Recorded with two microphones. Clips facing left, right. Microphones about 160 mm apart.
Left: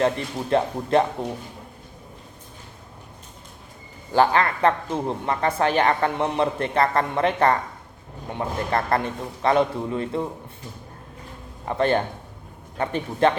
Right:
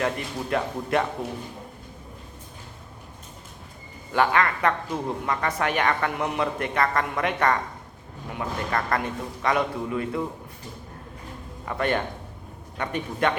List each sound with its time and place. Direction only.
0.5 s a man's voice: 30° left (ahead or behind)
4.1 s a man's voice: 30° left (ahead or behind)
11.6 s a man's voice: 30° left (ahead or behind)